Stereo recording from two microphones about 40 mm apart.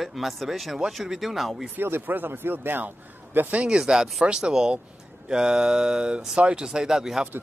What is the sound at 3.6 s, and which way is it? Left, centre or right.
Speech, right.